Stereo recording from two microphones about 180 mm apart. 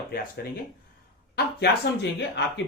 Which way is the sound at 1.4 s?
65° left (ahead or behind).